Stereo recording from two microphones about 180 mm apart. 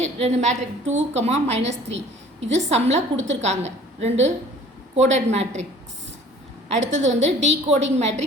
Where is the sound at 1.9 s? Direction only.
90° right.